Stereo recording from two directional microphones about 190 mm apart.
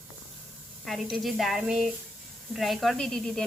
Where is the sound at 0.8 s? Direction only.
Centre (ahead or behind).